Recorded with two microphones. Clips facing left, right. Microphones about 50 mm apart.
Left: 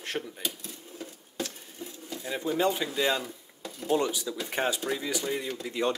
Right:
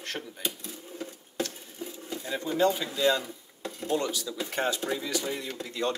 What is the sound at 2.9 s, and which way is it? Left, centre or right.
Speech, centre.